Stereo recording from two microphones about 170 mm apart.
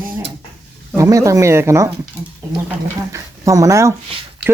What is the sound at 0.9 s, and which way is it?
Speech, 20° right (ahead or behind).